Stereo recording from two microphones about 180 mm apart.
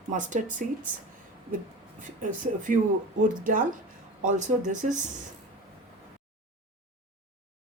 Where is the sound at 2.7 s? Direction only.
50° right (ahead or behind).